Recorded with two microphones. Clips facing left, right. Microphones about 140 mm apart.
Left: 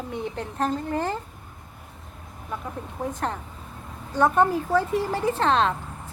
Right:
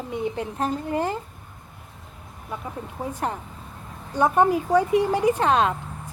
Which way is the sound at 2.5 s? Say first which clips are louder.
Even; 5° right (ahead or behind).